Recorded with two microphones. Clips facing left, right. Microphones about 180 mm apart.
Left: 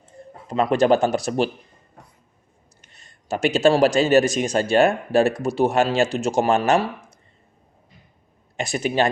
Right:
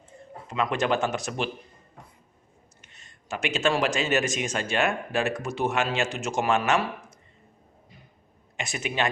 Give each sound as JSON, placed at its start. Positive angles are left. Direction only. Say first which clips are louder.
{"t": 0.4, "sound": "a man's voice", "louder": "left 8 dB", "side_deg": 35}
{"t": 2.8, "sound": "a man's voice", "louder": "left 3 dB", "side_deg": 35}
{"t": 8.5, "sound": "a man's voice", "louder": "left 8 dB", "side_deg": 35}